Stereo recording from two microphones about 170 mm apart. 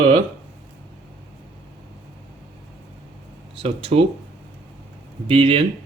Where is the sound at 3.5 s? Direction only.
35° right (ahead or behind).